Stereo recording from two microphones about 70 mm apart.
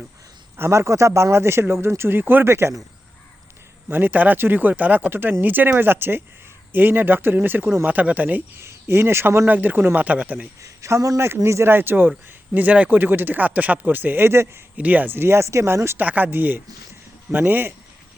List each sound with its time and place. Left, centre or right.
0.5 s a man's voice: right
3.8 s a man's voice: right
7.9 s a man's voice: right
10.6 s a man's voice: right
14.8 s a man's voice: right
16.0 s speech: right